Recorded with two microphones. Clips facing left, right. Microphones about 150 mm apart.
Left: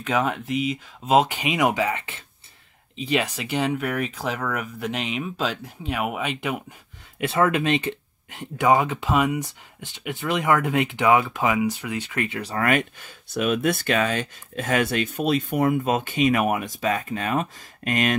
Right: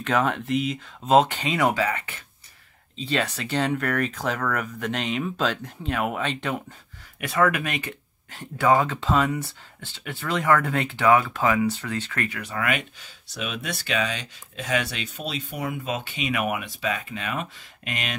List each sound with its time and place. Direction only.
0.0 s speech: 5° left (ahead or behind); by 2.2 s 25° left (ahead or behind)
3.0 s speech: 10° left (ahead or behind)
7.2 s speech: 25° left (ahead or behind)
12.4 s speech: 35° left (ahead or behind)